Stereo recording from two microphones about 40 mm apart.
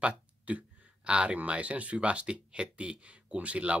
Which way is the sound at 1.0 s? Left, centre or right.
Right.